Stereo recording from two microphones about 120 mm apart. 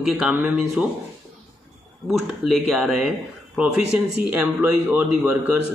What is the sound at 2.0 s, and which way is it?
A man's voice, centre (ahead or behind).